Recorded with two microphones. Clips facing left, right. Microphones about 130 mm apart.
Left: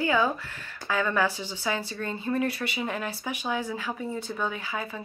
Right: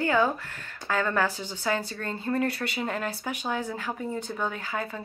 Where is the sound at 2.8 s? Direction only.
50° right (ahead or behind).